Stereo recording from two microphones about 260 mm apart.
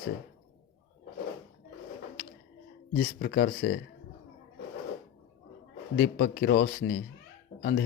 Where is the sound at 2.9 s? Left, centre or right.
Left.